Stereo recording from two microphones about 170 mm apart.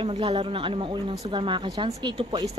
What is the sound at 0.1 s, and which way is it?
Speech, 30° right (ahead or behind).